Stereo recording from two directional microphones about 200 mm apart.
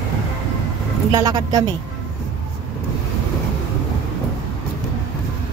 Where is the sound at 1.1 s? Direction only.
15° right (ahead or behind).